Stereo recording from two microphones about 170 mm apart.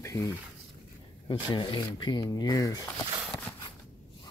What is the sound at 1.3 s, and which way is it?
Speech, 30° left (ahead or behind).